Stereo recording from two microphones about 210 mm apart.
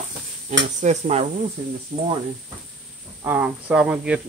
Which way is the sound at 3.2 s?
10° right (ahead or behind).